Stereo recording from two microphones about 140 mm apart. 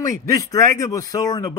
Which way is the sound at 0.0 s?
25° left (ahead or behind).